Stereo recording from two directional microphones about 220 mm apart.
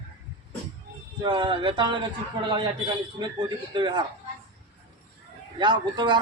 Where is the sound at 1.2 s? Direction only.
20° right (ahead or behind).